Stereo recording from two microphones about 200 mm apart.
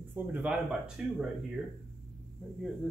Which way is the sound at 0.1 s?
10° right (ahead or behind).